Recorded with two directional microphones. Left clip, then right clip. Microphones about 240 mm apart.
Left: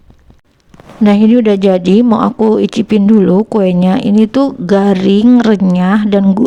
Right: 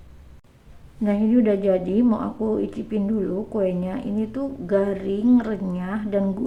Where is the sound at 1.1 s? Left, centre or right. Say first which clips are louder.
Left 11 dB; left.